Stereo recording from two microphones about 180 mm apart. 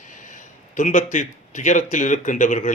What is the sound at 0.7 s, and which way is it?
Speech, 45° left (ahead or behind).